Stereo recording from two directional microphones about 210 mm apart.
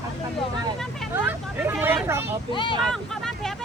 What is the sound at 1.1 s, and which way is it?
Hubbub, 10° right (ahead or behind).